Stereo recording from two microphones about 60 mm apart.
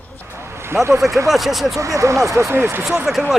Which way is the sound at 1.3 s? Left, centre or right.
Centre.